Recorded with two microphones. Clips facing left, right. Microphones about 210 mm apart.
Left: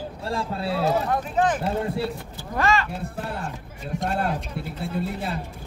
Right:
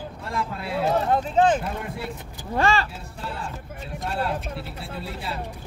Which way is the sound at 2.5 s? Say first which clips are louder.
Right 1 dB; 30° right (ahead or behind).